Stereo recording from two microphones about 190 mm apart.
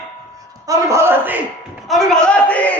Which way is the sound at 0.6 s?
15° right (ahead or behind).